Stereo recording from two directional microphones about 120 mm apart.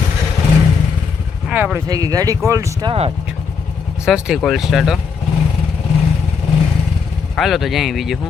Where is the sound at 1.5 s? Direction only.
15° right (ahead or behind).